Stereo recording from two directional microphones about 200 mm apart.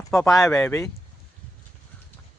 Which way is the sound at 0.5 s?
10° left (ahead or behind).